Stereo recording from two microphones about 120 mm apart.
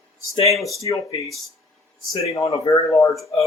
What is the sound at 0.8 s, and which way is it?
Speech, 25° left (ahead or behind).